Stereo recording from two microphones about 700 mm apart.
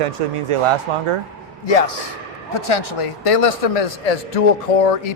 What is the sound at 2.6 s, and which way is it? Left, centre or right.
A man's voice, left.